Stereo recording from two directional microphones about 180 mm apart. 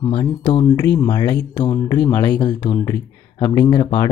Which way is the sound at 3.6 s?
25° left (ahead or behind).